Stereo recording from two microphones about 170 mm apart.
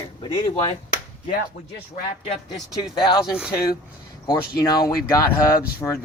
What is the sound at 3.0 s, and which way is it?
Speech, 25° left (ahead or behind).